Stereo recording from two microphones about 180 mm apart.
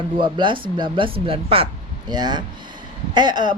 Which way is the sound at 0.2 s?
25° right (ahead or behind).